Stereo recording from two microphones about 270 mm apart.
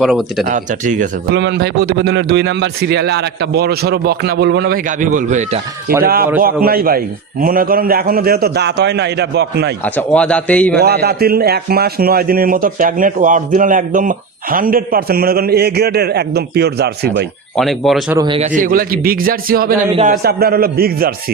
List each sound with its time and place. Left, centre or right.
0.0 s a man's voice: centre
0.4 s speech: right
1.4 s speech: right
9.8 s a man's voice: centre
10.8 s speech: right
17.6 s a man's voice: centre
18.2 s speech: right